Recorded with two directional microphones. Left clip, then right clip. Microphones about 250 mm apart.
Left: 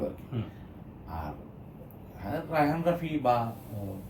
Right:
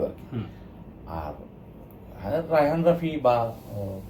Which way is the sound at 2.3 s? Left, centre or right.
Centre.